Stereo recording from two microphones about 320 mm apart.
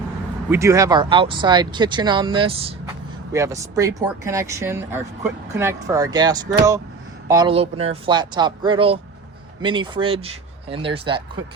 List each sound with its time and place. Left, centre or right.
0.5 s speech: centre